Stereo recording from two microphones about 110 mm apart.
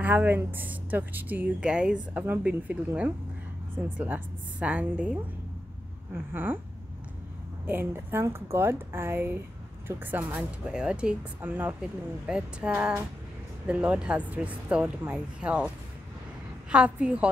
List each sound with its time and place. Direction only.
0.0 s speech: 15° right (ahead or behind)
6.3 s a woman's voice: 20° right (ahead or behind)
7.6 s a woman's voice: 20° right (ahead or behind)
10.7 s speech: 10° right (ahead or behind)
16.7 s speech: 10° right (ahead or behind)